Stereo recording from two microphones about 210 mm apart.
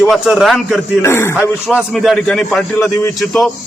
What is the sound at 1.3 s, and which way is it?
Speech, centre (ahead or behind).